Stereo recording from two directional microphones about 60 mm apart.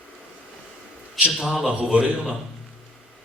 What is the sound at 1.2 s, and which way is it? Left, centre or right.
A man's voice, centre.